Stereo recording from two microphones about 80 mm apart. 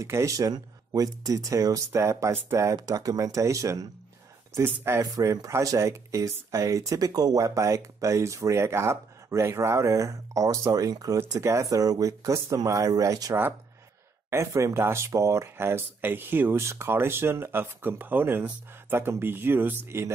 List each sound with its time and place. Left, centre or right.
0.0 s speech: right
2.9 s speech: right
11.1 s speech: right
11.7 s speech: right